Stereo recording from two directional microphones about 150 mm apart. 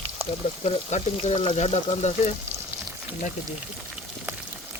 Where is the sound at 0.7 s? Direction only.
50° left (ahead or behind).